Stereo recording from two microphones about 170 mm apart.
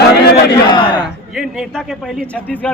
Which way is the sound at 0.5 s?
25° left (ahead or behind).